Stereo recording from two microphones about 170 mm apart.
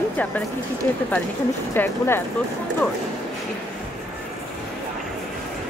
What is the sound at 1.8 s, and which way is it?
Speech, 15° left (ahead or behind).